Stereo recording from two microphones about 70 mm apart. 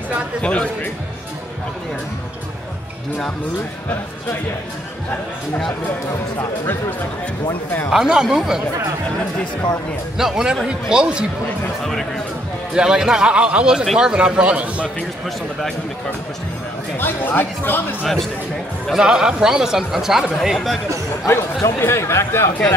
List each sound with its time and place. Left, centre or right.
0.4 s speech: centre
7.9 s a man's voice: centre
10.1 s a man's voice: centre
11.8 s speech: centre
12.7 s a man's voice: centre
17.0 s speech: left
18.9 s speech: centre
21.3 s speech: left